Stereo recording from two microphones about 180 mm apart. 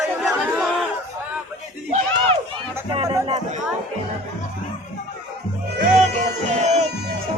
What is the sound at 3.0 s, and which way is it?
Music, 20° right (ahead or behind).